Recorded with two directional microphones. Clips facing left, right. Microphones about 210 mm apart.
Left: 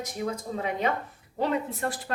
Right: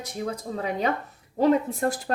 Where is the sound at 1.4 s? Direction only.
40° right (ahead or behind).